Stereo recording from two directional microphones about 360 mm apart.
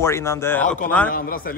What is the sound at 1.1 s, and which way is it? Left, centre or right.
Speech, left.